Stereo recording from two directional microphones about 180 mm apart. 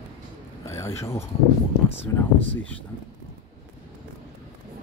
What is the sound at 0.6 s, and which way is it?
Speech, 15° left (ahead or behind).